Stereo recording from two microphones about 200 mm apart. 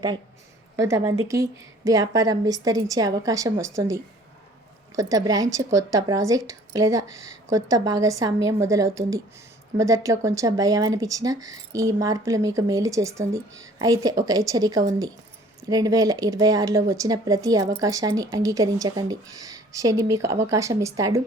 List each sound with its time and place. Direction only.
0.8 s speech: 15° right (ahead or behind)